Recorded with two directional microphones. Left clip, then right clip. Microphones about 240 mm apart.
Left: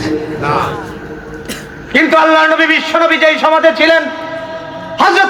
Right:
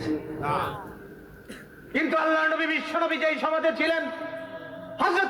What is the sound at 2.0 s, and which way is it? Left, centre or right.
A man's voice, left.